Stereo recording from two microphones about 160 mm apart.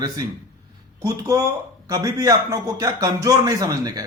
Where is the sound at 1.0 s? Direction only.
20° right (ahead or behind).